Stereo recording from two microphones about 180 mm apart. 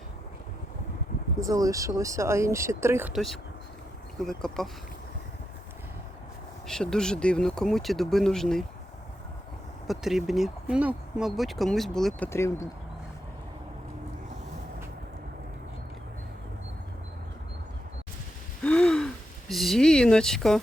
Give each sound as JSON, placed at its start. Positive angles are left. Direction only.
{"t": 1.4, "sound": "speech", "side_deg": -20}
{"t": 3.1, "sound": "speech", "side_deg": 0}
{"t": 6.7, "sound": "speech", "side_deg": 5}
{"t": 9.8, "sound": "speech", "side_deg": 0}
{"t": 12.3, "sound": "speech", "side_deg": 15}
{"t": 18.6, "sound": "gasp", "side_deg": 5}